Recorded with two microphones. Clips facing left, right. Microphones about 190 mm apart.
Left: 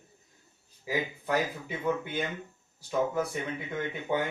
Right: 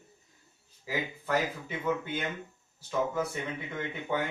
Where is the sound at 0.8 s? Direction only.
15° left (ahead or behind).